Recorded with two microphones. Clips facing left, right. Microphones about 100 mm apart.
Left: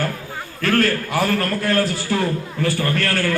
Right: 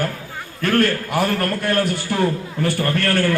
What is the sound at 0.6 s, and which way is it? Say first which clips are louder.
A man's voice: right 1 dB; 15° right (ahead or behind).